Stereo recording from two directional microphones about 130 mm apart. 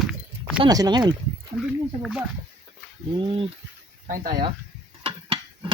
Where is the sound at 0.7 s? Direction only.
30° right (ahead or behind).